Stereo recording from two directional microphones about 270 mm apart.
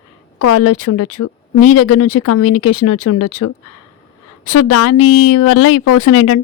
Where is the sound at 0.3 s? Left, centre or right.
Left.